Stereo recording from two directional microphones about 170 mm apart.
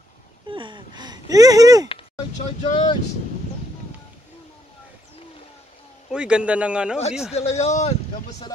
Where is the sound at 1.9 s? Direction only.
40° left (ahead or behind).